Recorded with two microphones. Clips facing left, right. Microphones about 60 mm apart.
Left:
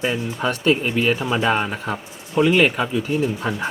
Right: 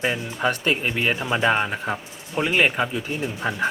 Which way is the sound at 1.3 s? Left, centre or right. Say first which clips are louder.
Left 1 dB; centre.